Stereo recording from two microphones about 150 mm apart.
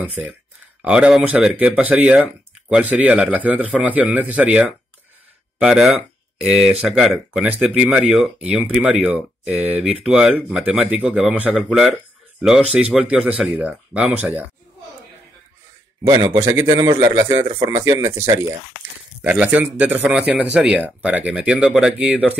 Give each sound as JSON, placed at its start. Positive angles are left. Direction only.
{"t": 0.0, "sound": "speech", "side_deg": -10}
{"t": 16.1, "sound": "a man's voice", "side_deg": -25}